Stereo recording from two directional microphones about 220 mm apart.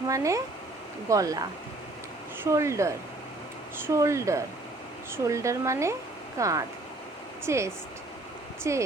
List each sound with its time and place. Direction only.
0.1 s speech: 15° right (ahead or behind)